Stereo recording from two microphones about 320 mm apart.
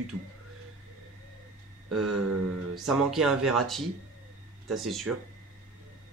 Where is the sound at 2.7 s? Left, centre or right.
Centre.